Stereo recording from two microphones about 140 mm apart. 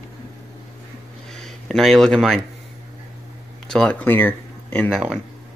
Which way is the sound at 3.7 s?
10° left (ahead or behind).